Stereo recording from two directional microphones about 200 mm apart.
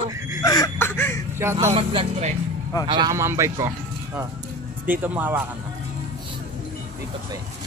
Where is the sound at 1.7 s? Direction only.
25° right (ahead or behind).